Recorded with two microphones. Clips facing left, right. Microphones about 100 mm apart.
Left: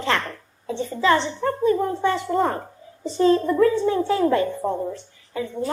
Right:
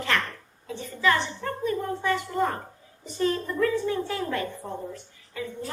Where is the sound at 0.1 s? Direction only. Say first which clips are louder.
Left 3 dB; 30° left (ahead or behind).